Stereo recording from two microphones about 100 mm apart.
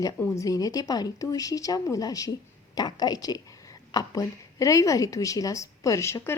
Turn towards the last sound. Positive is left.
turn(degrees=30)  # may be behind; listen again after turning